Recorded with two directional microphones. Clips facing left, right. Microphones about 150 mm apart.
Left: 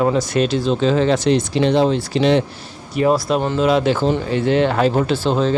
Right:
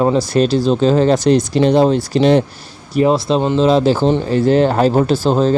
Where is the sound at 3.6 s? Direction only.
35° right (ahead or behind).